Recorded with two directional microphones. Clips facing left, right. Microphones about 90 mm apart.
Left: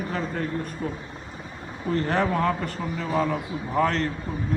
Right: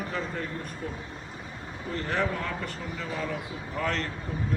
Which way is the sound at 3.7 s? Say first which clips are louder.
Left 7 dB; 40° left (ahead or behind).